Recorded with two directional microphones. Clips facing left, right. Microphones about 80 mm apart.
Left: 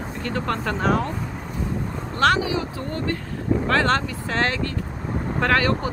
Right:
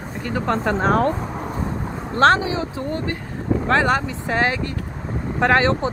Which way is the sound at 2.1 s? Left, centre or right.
Right.